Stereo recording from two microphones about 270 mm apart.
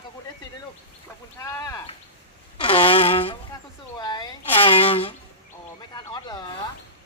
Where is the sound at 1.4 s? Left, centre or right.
Centre.